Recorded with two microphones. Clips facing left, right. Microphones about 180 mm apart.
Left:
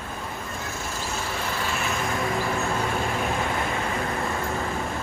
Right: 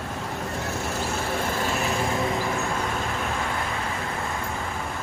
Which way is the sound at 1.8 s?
25° right (ahead or behind).